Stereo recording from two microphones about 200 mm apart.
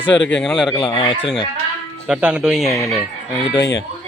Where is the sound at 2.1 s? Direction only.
5° right (ahead or behind).